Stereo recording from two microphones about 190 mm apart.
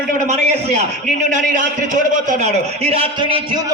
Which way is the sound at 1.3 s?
40° right (ahead or behind).